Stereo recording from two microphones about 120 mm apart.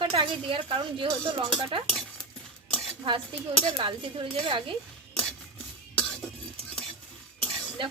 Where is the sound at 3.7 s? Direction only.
45° right (ahead or behind).